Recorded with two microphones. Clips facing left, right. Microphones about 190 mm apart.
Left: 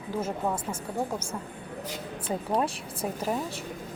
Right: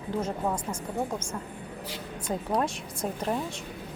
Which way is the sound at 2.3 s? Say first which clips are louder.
Even; 10° left (ahead or behind).